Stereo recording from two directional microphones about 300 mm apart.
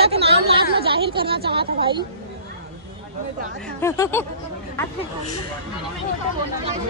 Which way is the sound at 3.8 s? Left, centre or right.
Centre.